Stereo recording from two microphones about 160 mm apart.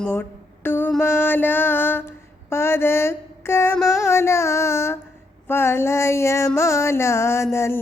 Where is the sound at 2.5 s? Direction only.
15° left (ahead or behind).